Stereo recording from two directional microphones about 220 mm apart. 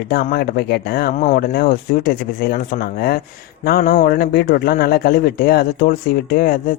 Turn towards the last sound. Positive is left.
turn(degrees=45)  # may be behind; listen again after turning